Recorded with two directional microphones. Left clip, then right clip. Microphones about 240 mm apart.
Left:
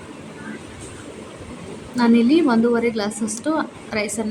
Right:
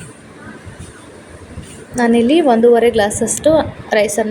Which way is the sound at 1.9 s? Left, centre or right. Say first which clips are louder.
Right 5 dB; centre.